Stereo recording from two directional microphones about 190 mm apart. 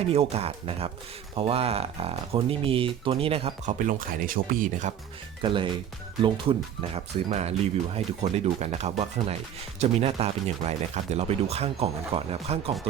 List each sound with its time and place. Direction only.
0.1 s speech: 30° right (ahead or behind)
5.4 s speech: 25° right (ahead or behind)